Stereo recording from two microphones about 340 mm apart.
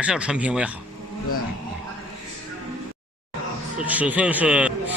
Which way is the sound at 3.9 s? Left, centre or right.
Centre.